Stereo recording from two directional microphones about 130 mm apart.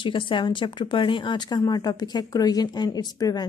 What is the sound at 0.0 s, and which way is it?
A woman's voice, 40° left (ahead or behind).